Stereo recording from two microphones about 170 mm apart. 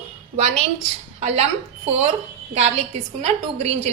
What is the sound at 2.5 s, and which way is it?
A woman's voice, 40° right (ahead or behind).